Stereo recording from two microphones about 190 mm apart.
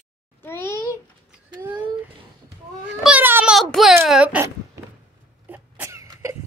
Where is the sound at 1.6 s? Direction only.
10° right (ahead or behind).